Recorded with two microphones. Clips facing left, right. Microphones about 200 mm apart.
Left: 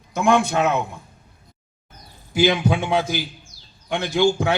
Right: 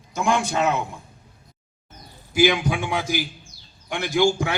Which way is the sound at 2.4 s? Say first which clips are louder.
Left 1 dB; 20° left (ahead or behind).